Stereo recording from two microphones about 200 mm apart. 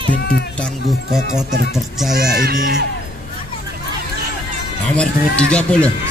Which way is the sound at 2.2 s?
50° right (ahead or behind).